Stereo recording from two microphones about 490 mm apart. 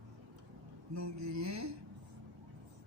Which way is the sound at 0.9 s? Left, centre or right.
Right.